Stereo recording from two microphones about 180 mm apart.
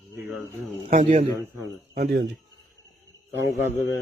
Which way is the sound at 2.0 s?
65° right (ahead or behind).